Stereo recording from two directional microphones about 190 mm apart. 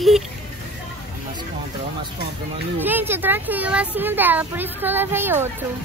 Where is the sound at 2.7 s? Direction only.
10° right (ahead or behind).